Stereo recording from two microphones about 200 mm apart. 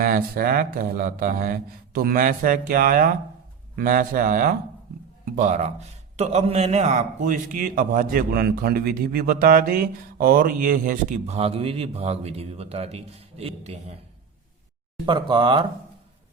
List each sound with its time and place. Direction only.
0.0 s a man's voice: 45° right (ahead or behind)
15.0 s speech: 25° right (ahead or behind)